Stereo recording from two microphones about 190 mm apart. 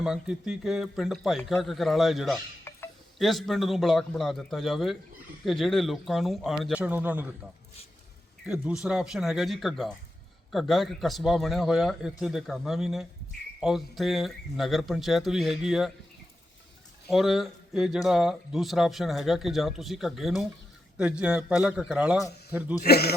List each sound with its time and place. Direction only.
0.0 s speech: 5° right (ahead or behind)
2.7 s a sound: 10° left (ahead or behind)
3.2 s speech: centre (ahead or behind)
8.4 s speech: 5° right (ahead or behind)
17.1 s speech: centre (ahead or behind)
22.8 s speech: 55° left (ahead or behind)